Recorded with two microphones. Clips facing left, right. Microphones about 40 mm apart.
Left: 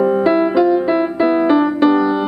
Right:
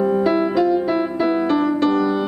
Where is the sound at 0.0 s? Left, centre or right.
Centre.